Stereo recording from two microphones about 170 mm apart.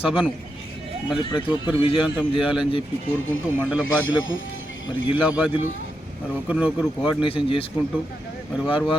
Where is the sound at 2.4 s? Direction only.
5° right (ahead or behind).